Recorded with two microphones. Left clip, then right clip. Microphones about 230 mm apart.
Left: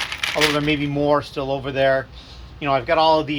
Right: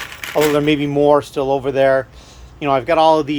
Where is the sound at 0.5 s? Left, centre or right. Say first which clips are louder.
Right 6 dB; right.